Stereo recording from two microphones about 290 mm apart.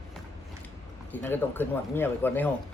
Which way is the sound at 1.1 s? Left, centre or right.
Centre.